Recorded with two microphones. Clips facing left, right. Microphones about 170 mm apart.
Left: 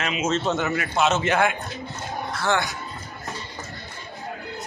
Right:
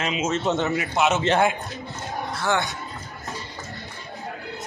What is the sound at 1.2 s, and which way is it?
Speech, 25° right (ahead or behind).